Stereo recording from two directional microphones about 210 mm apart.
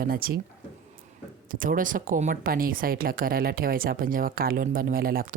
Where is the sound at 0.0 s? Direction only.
45° right (ahead or behind).